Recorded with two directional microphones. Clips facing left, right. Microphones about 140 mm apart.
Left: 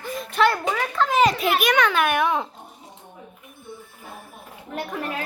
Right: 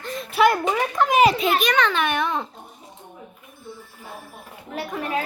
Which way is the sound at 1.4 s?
10° left (ahead or behind).